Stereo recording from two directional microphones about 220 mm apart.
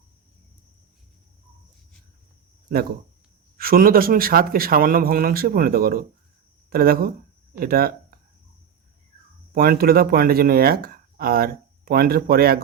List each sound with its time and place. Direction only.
3.6 s speech: 40° right (ahead or behind)
9.6 s speech: 45° right (ahead or behind)